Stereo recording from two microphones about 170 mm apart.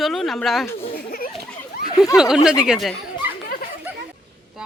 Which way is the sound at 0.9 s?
60° left (ahead or behind).